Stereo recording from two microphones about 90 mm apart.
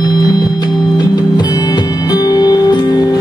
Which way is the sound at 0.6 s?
50° left (ahead or behind).